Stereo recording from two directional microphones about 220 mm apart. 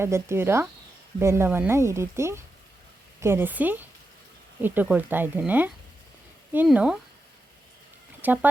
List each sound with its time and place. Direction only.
0.0 s speech: 10° right (ahead or behind)
8.2 s speech: 10° right (ahead or behind)